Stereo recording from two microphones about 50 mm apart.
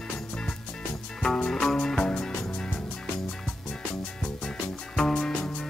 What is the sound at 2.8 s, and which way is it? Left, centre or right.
Music, centre.